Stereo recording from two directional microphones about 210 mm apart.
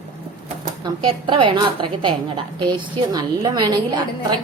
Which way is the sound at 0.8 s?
20° right (ahead or behind).